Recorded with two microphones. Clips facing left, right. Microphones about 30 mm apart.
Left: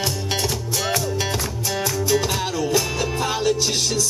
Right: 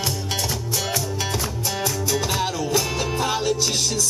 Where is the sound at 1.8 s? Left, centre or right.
Centre.